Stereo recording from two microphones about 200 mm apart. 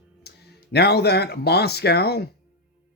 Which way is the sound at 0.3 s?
55° left (ahead or behind).